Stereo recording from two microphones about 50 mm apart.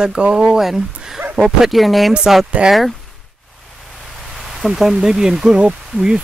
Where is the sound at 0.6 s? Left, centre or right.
Centre.